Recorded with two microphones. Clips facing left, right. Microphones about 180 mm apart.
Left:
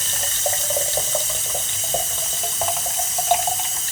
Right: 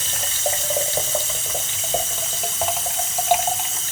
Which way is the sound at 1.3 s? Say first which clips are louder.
Even; 35° left (ahead or behind).